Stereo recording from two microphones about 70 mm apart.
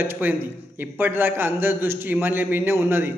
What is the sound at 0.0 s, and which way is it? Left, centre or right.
A man's voice, right.